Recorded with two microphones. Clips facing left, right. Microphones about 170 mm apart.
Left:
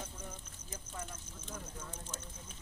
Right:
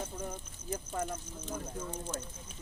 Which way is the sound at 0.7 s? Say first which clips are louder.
Right 10 dB; 70° right (ahead or behind).